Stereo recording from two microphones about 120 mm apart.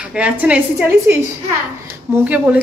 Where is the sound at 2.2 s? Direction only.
10° right (ahead or behind).